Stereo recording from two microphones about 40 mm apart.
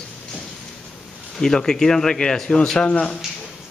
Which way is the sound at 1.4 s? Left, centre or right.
Centre.